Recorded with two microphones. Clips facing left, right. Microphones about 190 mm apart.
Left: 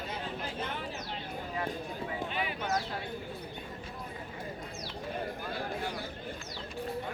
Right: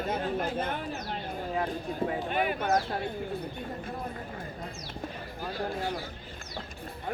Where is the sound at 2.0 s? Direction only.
50° right (ahead or behind).